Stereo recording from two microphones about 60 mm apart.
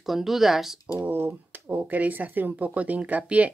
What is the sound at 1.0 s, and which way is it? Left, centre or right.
Speech, right.